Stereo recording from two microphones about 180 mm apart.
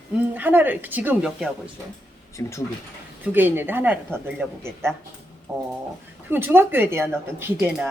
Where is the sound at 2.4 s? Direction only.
15° left (ahead or behind).